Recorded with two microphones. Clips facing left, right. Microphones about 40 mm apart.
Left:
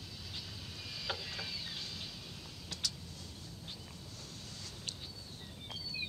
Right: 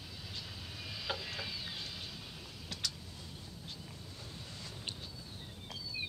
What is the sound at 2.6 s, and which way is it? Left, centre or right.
Vehicle, centre.